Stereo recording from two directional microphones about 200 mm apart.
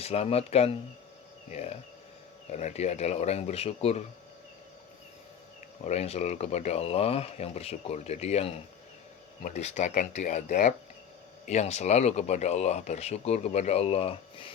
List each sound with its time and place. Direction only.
0.0 s speech: 30° left (ahead or behind)
5.8 s speech: 35° left (ahead or behind)